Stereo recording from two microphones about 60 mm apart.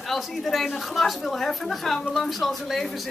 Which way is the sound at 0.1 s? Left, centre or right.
Centre.